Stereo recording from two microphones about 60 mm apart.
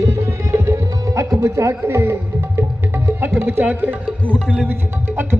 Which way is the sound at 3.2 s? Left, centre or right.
Right.